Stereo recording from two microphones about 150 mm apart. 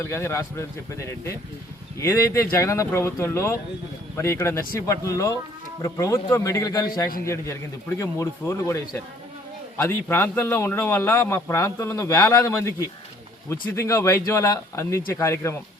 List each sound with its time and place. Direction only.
0.0 s a man's voice: 15° left (ahead or behind)